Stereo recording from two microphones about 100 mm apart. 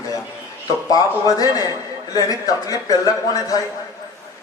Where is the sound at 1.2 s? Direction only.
35° left (ahead or behind).